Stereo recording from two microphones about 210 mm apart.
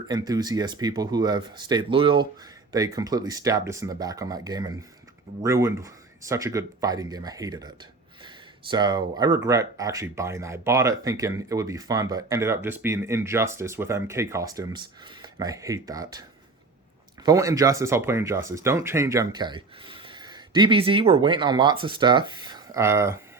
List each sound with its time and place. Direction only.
0.1 s speech: 20° right (ahead or behind)
8.7 s speech: 20° right (ahead or behind)
17.2 s speech: 15° right (ahead or behind)